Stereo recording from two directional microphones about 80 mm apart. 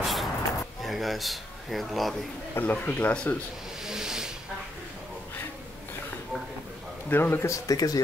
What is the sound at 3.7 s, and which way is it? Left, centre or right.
Snake, centre.